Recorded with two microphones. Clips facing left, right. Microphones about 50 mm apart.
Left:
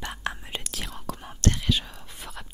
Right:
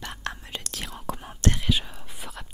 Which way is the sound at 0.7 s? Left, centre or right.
Centre.